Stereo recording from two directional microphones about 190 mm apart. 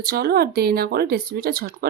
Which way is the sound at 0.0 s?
55° right (ahead or behind).